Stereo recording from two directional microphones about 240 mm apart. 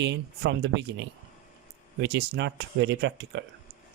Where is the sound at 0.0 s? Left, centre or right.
Right.